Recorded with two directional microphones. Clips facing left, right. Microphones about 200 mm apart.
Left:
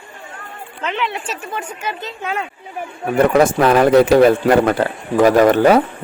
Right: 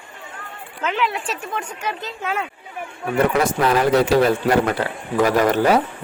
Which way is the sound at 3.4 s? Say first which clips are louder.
Left 5 dB; 55° left (ahead or behind).